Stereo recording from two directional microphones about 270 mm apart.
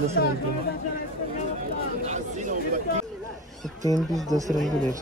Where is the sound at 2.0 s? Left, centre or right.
Right.